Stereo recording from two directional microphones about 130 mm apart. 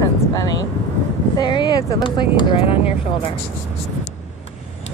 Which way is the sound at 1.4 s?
35° left (ahead or behind).